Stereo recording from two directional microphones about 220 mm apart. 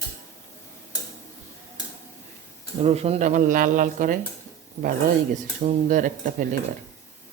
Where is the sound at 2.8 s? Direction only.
30° right (ahead or behind).